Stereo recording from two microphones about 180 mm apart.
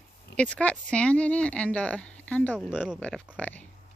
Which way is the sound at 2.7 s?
5° right (ahead or behind).